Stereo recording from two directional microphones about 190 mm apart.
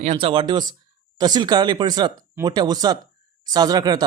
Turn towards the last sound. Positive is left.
turn(degrees=-20)  # may be behind; listen again after turning